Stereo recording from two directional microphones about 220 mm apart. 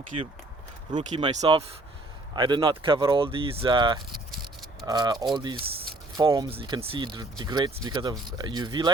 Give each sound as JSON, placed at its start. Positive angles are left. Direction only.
{"t": 0.1, "sound": "speech", "side_deg": -30}